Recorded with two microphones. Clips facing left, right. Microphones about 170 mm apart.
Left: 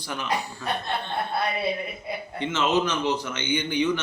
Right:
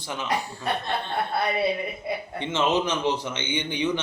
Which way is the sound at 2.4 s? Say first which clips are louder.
Left 1 dB; 25° right (ahead or behind).